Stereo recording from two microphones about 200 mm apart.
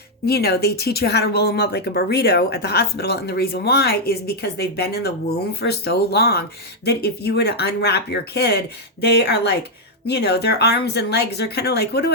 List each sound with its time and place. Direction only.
0.3 s speech: 50° left (ahead or behind)